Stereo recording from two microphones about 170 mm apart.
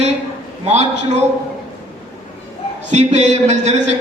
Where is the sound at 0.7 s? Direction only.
40° right (ahead or behind).